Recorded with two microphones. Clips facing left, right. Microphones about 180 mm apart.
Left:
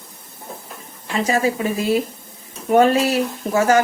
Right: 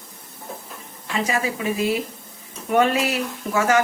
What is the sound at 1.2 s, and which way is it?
Speech, 40° left (ahead or behind).